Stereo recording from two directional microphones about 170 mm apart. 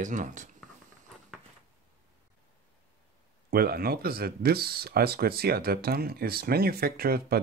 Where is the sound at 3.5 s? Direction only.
65° right (ahead or behind).